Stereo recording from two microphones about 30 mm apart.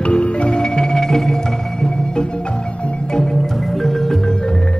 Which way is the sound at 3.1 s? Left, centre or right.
Centre.